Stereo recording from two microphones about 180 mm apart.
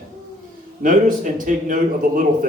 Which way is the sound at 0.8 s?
50° right (ahead or behind).